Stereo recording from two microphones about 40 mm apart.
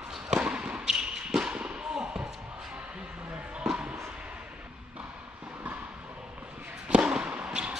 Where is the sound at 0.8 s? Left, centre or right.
Centre.